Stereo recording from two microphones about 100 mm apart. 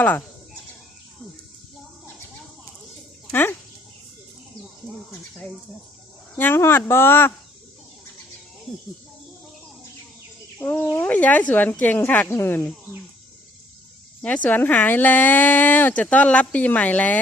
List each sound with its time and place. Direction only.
0.0 s speech: 15° left (ahead or behind)
6.3 s speech: 20° left (ahead or behind)
10.6 s speech: 20° left (ahead or behind)
14.2 s speech: 15° left (ahead or behind)